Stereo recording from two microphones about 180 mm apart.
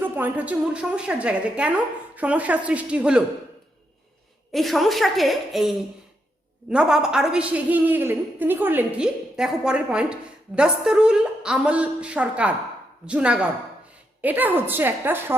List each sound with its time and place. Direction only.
0.0 s a woman's voice: 10° right (ahead or behind)
4.5 s a woman's voice: centre (ahead or behind)